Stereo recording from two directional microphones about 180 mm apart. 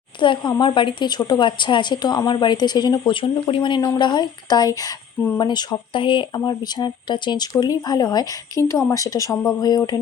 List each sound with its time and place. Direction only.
0.2 s a woman's voice: 25° left (ahead or behind)